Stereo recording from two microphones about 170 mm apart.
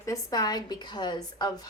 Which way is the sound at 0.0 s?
20° left (ahead or behind).